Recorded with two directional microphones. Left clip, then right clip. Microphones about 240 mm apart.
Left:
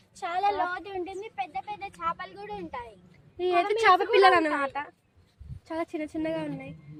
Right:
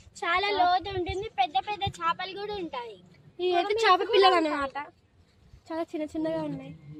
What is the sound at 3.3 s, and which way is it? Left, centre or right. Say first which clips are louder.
A woman's voice: left 1 dB; centre.